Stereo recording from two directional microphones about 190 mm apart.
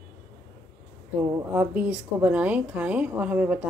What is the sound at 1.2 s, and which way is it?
A woman's voice, 10° right (ahead or behind).